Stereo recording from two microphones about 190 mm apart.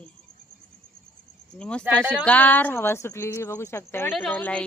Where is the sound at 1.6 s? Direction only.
5° left (ahead or behind).